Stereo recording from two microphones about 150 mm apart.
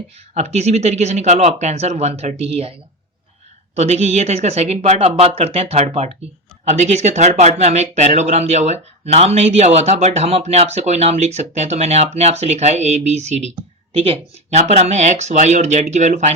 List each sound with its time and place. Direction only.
0.3 s speech: 45° right (ahead or behind)
3.8 s speech: 45° right (ahead or behind)